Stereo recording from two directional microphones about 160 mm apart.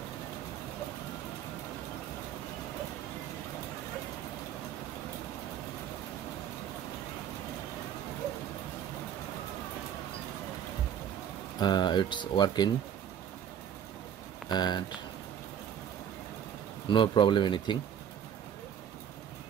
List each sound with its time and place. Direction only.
11.6 s speech: 25° left (ahead or behind)
14.5 s speech: 25° left (ahead or behind)
16.9 s speech: 30° left (ahead or behind)